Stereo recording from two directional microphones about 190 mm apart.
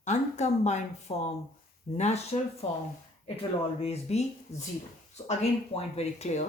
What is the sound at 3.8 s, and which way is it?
Speech, 30° left (ahead or behind).